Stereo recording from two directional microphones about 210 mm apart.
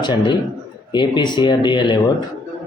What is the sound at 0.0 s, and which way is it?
Speech, 20° left (ahead or behind).